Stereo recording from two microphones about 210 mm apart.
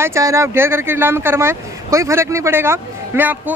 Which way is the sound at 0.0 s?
15° right (ahead or behind).